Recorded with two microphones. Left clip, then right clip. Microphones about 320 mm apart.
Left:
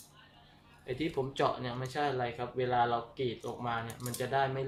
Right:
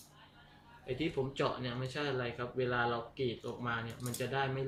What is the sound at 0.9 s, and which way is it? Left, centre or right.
Speech, centre.